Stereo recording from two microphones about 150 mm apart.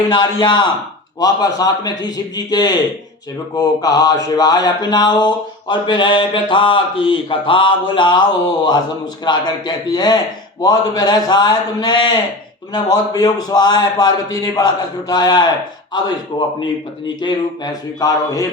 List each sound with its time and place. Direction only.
0.1 s a man's voice: 30° left (ahead or behind)
3.6 s mantra: 25° left (ahead or behind)
9.2 s a man's voice: 30° left (ahead or behind)
17.2 s a man's voice: 25° left (ahead or behind)